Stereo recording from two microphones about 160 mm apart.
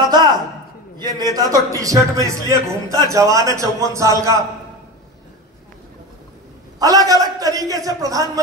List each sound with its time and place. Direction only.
0.1 s a sound: 25° right (ahead or behind)
0.9 s a man's voice: 25° right (ahead or behind)
6.8 s a man's voice: 20° right (ahead or behind)